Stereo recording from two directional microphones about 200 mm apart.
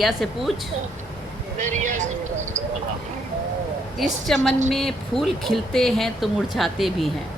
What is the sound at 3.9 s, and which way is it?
Speech, centre (ahead or behind).